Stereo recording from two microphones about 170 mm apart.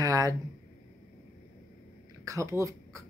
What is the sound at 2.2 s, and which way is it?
Speech, 20° right (ahead or behind).